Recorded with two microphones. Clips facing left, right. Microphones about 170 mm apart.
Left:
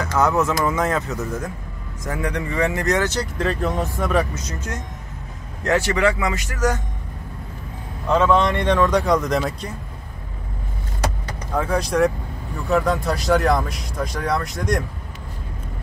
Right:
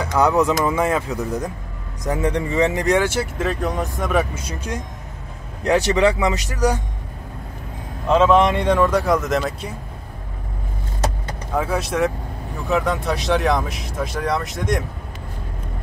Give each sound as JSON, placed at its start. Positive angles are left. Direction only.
{"t": 0.0, "sound": "speech", "side_deg": -15}
{"t": 8.1, "sound": "a man's voice", "side_deg": -20}
{"t": 8.6, "sound": "speech", "side_deg": -5}
{"t": 11.5, "sound": "speech", "side_deg": -5}